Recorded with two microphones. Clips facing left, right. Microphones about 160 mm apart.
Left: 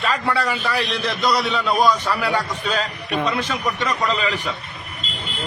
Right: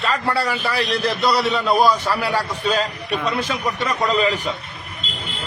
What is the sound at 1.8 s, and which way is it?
Speech, 5° right (ahead or behind).